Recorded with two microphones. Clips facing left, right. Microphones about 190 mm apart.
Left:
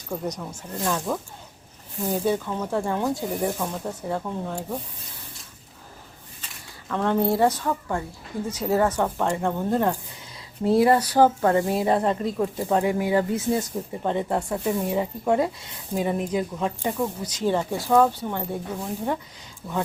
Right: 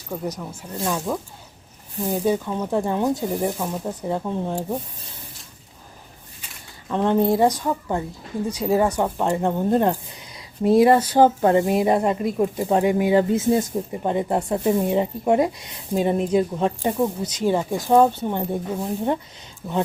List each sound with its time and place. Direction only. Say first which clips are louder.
0.1 s speech: right 1 dB; 5° right (ahead or behind)
2.2 s speech: right 4 dB; 15° right (ahead or behind)
6.8 s speech: right 3 dB; 20° right (ahead or behind)
17.0 s speech: right 4 dB; 20° right (ahead or behind)